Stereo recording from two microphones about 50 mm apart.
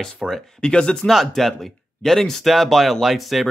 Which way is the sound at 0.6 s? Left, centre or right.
Centre.